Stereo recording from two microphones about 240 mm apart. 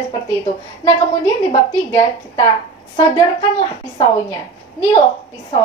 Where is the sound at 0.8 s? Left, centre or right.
Centre.